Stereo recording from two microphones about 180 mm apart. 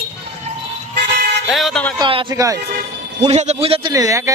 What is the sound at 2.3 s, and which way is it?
Speech, 20° right (ahead or behind).